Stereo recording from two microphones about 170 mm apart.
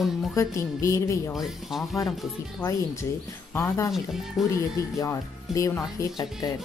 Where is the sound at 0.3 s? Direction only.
20° left (ahead or behind).